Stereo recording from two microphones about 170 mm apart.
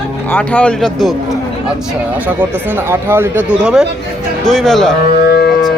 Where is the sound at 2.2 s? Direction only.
10° right (ahead or behind).